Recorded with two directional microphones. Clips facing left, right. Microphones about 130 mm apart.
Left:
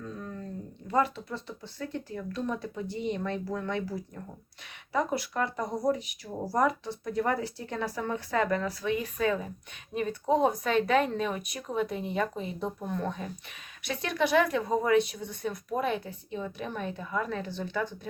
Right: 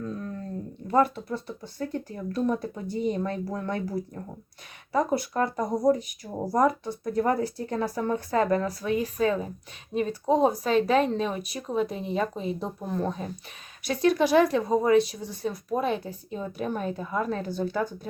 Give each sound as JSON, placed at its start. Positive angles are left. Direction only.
{"t": 0.9, "sound": "speech", "side_deg": -50}
{"t": 6.2, "sound": "speech", "side_deg": -20}
{"t": 6.6, "sound": "speech", "side_deg": -40}